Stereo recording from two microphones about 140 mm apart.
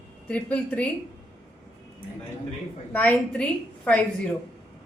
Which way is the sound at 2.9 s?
10° left (ahead or behind).